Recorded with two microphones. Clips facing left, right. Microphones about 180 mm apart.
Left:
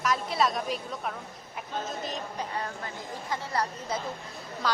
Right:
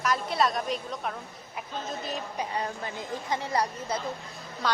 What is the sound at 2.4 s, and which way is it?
A woman's voice, 20° right (ahead or behind).